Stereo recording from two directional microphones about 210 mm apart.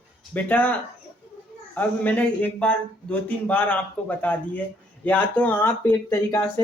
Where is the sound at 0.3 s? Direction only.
5° left (ahead or behind).